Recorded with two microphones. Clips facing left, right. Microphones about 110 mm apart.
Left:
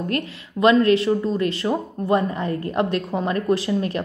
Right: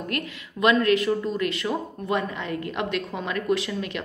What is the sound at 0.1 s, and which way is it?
A woman's voice, 30° left (ahead or behind).